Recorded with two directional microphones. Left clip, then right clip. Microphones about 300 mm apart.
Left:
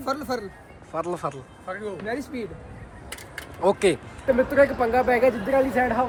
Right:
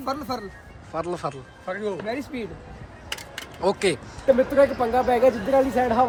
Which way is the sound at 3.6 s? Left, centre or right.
Centre.